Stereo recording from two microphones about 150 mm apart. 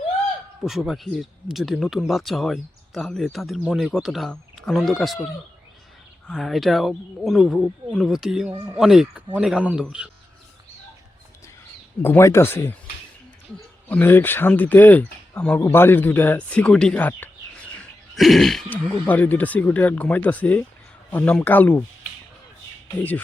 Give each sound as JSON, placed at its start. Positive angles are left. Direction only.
{"t": 0.6, "sound": "speech", "side_deg": 0}
{"t": 6.3, "sound": "speech", "side_deg": 0}
{"t": 12.0, "sound": "speech", "side_deg": 15}
{"t": 13.8, "sound": "speech", "side_deg": 10}
{"t": 18.2, "sound": "speech", "side_deg": 0}